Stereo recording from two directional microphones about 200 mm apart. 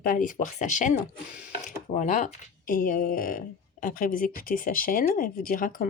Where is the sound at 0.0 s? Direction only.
45° left (ahead or behind).